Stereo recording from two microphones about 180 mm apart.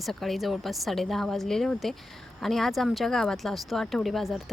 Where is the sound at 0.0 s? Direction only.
Centre (ahead or behind).